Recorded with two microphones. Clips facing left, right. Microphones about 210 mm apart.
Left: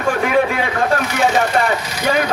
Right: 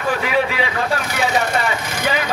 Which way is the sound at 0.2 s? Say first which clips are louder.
Left 3 dB; 50° left (ahead or behind).